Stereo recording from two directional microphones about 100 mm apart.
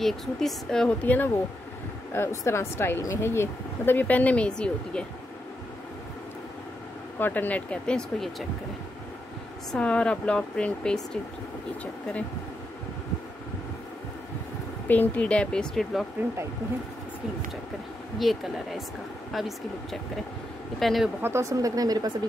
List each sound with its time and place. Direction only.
0.0 s a woman's voice: 5° left (ahead or behind)
7.2 s speech: 20° left (ahead or behind)
9.7 s speech: 10° left (ahead or behind)
14.9 s speech: 15° left (ahead or behind)
18.2 s speech: centre (ahead or behind)
21.2 s speech: 30° right (ahead or behind)